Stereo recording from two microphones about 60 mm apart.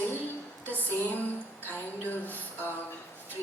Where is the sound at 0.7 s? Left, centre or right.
Left.